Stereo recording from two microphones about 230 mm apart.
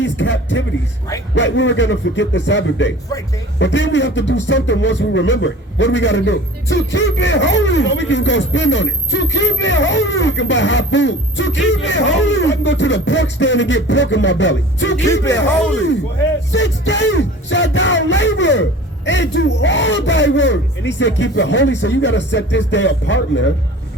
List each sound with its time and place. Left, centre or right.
0.0 s music: left
1.4 s speech: left
15.1 s speech: centre
15.4 s speech: left